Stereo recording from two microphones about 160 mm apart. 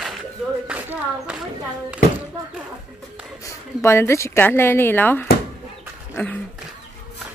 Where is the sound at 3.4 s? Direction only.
15° left (ahead or behind).